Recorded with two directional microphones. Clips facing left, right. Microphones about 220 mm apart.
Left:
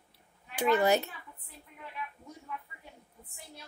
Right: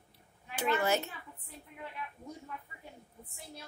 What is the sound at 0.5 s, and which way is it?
Speech, 15° left (ahead or behind).